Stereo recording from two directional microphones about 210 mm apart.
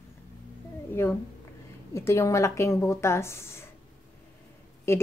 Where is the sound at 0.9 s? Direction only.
10° left (ahead or behind).